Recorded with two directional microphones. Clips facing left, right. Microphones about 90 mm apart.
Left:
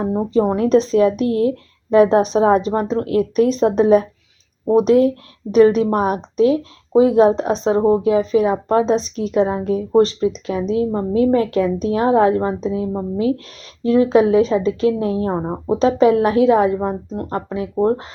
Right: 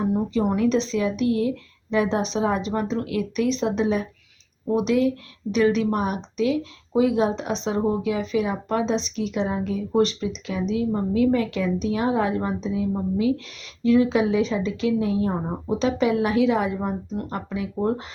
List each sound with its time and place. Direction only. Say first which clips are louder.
0.0 s speech: left 5 dB; 35° left (ahead or behind)